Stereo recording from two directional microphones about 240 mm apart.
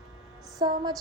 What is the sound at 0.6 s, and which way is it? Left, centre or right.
Child singing, centre.